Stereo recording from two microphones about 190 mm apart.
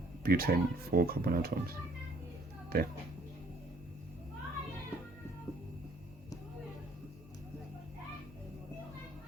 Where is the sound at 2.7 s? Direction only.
55° right (ahead or behind).